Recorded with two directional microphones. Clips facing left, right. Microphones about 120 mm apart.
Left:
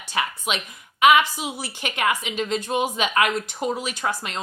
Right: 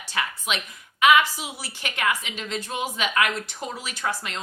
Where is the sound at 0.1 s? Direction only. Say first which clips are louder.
Left 3 dB; 20° left (ahead or behind).